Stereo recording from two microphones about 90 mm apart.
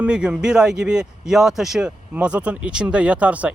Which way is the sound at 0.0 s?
10° right (ahead or behind).